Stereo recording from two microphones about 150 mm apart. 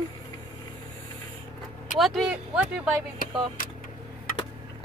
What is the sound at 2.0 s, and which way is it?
Speech, 5° right (ahead or behind).